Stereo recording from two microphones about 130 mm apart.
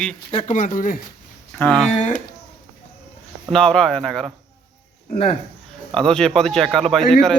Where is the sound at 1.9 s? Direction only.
70° left (ahead or behind).